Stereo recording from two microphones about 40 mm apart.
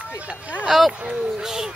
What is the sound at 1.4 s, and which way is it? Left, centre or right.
Speech, centre.